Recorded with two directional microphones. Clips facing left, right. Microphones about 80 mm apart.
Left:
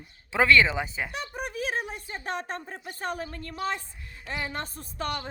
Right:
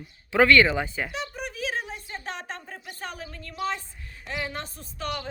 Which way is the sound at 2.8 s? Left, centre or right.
Left.